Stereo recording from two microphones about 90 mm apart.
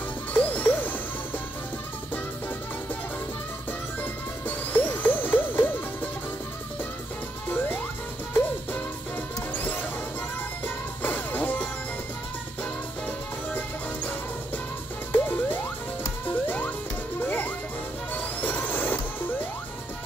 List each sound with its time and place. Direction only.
0.3 s music: 15° left (ahead or behind)
4.0 s music: 20° left (ahead or behind)
7.4 s music: 20° left (ahead or behind)
9.5 s music: 20° left (ahead or behind)
11.0 s music: 20° left (ahead or behind)
13.5 s music: 20° left (ahead or behind)
15.1 s music: 20° left (ahead or behind)